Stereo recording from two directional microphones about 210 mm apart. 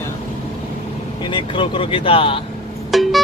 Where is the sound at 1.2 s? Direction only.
25° left (ahead or behind).